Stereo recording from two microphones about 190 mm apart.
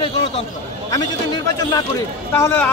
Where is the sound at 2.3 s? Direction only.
10° left (ahead or behind).